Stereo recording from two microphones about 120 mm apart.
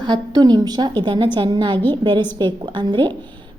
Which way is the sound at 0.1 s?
35° right (ahead or behind).